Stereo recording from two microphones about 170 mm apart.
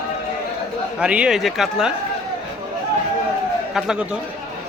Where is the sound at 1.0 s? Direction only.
5° right (ahead or behind).